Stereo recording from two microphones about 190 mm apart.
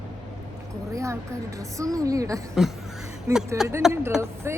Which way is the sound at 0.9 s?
15° right (ahead or behind).